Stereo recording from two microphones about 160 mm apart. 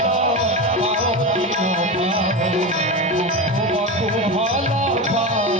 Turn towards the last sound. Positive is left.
turn(degrees=-50)  # may be behind; listen again after turning